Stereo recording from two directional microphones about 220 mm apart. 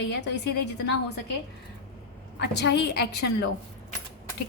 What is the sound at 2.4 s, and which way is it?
A woman's voice, 50° left (ahead or behind).